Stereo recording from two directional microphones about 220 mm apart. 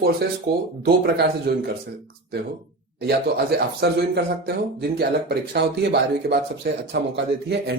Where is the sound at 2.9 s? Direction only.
45° right (ahead or behind).